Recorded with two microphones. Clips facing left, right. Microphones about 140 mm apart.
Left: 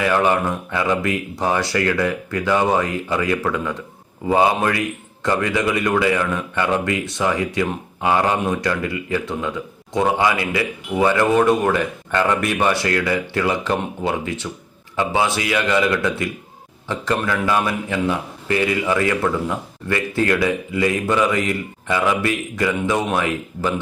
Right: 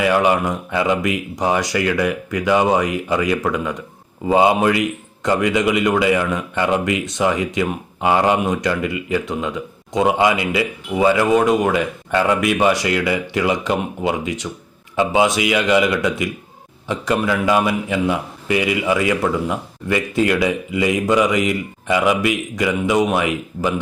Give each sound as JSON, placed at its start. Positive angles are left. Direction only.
{"t": 0.0, "sound": "a man's voice", "side_deg": -15}